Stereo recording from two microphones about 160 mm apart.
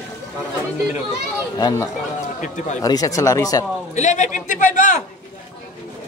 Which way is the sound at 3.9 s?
50° left (ahead or behind).